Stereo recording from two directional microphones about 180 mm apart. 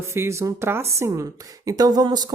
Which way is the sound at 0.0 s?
15° right (ahead or behind).